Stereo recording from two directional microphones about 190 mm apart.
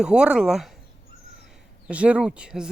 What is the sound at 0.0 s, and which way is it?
Speech, 5° right (ahead or behind).